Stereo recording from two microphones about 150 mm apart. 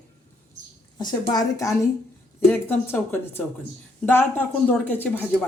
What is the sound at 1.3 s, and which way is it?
A woman's voice, 25° left (ahead or behind).